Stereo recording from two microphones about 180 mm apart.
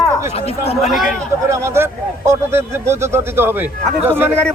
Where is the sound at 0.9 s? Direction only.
Centre (ahead or behind).